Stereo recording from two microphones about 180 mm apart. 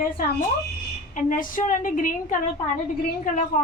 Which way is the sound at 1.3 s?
50° left (ahead or behind).